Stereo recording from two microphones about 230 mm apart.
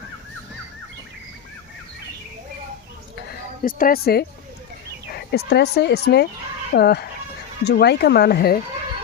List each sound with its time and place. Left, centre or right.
3.6 s a woman's voice: left